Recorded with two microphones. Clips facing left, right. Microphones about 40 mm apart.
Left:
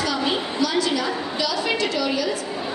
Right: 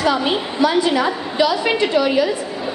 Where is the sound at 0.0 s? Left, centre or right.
Right.